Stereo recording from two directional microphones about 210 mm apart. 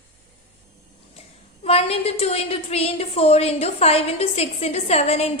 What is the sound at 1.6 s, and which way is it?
A woman's voice, 30° left (ahead or behind).